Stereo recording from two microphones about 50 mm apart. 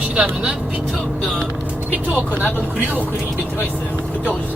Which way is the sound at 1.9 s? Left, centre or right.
Right.